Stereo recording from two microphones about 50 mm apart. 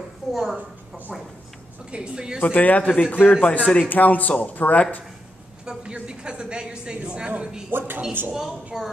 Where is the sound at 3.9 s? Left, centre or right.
Left.